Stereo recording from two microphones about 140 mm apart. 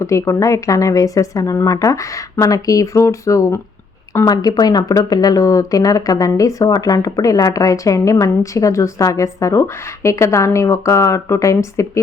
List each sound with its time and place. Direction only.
0.0 s a woman's voice: 20° left (ahead or behind)